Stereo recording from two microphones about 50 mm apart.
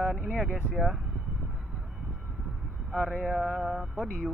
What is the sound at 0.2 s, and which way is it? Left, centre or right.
Speech, centre.